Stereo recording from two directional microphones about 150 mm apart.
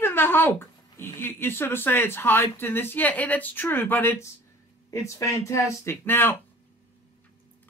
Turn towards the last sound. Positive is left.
turn(degrees=15)  # may be behind; listen again after turning